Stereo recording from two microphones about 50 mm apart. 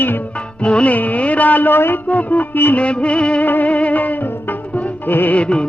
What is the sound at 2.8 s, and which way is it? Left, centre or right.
Music of bollywood, left.